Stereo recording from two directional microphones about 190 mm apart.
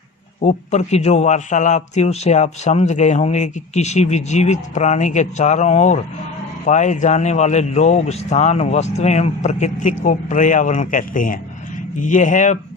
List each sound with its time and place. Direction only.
0.4 s a man's voice: 35° left (ahead or behind)